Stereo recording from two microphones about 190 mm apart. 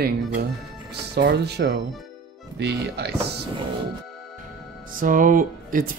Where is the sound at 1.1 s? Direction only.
60° right (ahead or behind).